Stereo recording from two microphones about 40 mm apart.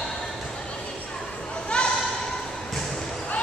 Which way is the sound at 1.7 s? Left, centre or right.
Left.